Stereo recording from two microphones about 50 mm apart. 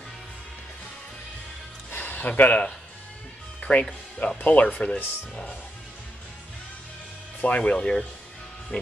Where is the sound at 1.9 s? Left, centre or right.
Left.